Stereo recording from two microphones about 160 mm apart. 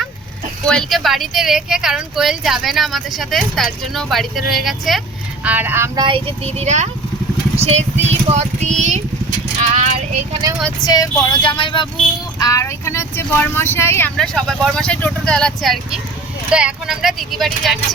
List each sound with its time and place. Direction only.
0.6 s speech: 5° left (ahead or behind); by 5.9 s 15° right (ahead or behind)
6.0 s speech: 30° right (ahead or behind); by 9.0 s 45° right (ahead or behind)
9.6 s music: 45° right (ahead or behind)
10.8 s speech: 25° left (ahead or behind)
12.4 s speech: 20° left (ahead or behind)
14.2 s speech: 5° left (ahead or behind)